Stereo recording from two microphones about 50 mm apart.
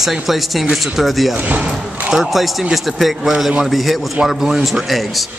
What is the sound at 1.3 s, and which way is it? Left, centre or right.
Speech, right.